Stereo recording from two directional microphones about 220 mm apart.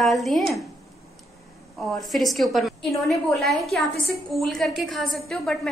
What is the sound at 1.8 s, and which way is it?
A woman's voice, centre (ahead or behind).